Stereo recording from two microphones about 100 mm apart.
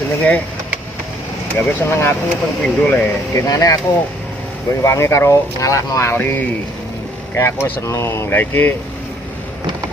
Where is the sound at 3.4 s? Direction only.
35° left (ahead or behind).